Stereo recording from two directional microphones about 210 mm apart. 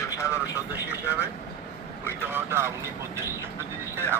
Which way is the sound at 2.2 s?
10° right (ahead or behind).